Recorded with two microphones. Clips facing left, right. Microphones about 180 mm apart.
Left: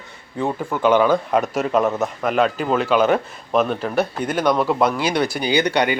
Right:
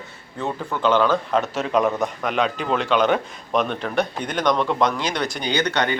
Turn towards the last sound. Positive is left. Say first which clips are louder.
# left 4 dB
turn(degrees=10)  # may be behind; listen again after turning